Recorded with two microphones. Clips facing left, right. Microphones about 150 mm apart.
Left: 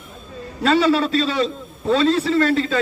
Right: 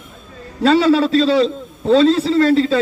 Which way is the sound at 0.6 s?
40° right (ahead or behind).